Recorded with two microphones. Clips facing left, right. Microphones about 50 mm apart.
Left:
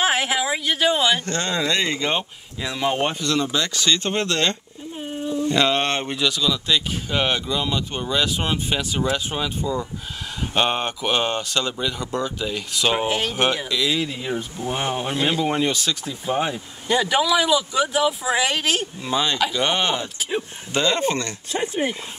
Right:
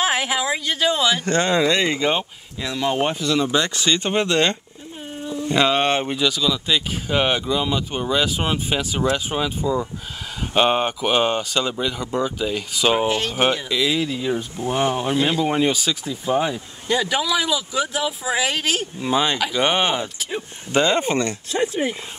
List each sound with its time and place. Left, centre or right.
0.0 s a sound: centre
1.2 s speech: right
2.1 s speech: centre
3.0 s speech: centre
3.5 s speech: right; by 14.0 s centre
14.0 s speech: centre
16.3 s speech: centre
19.0 s speech: centre
21.5 s speech: centre